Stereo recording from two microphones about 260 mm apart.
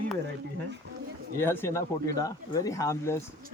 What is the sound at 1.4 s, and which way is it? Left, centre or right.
Speech, centre.